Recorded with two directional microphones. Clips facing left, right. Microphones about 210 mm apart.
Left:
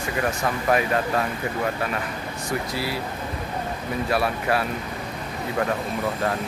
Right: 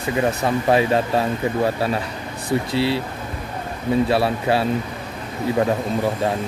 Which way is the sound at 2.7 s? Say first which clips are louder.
Right 8 dB; 25° right (ahead or behind).